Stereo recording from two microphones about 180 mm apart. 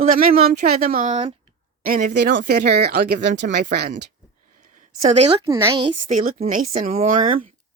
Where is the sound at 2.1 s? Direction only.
75° right (ahead or behind).